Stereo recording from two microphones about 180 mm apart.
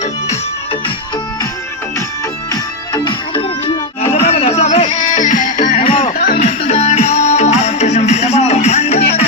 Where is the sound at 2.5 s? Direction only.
20° left (ahead or behind).